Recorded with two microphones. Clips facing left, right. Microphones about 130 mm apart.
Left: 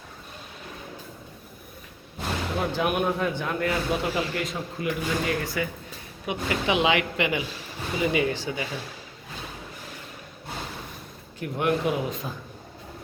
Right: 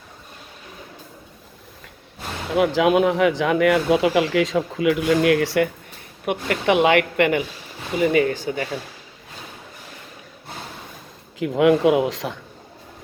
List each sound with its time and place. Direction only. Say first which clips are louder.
2.6 s speech: right 10 dB; 90° right
6.2 s speech: right 6 dB; 55° right (ahead or behind)
11.3 s speech: right 9 dB; 90° right